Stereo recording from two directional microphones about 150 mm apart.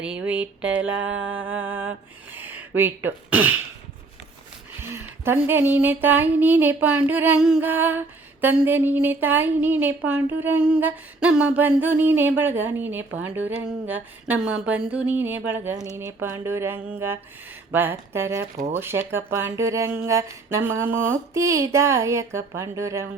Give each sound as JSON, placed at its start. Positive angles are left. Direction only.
{"t": 0.0, "sound": "speech", "side_deg": -10}
{"t": 4.8, "sound": "speech", "side_deg": -15}